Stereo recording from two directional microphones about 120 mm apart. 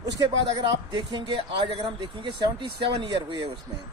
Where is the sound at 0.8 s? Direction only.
40° right (ahead or behind).